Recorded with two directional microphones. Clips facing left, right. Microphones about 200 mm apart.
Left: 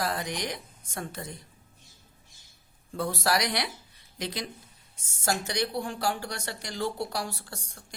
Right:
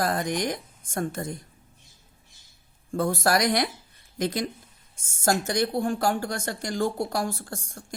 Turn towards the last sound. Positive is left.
turn(degrees=-45)  # may be behind; listen again after turning